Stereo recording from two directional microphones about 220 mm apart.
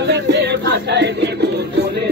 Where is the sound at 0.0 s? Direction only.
50° right (ahead or behind).